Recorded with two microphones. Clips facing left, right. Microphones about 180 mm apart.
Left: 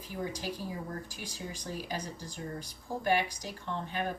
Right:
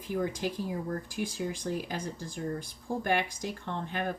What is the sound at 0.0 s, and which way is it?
Speech, 55° right (ahead or behind).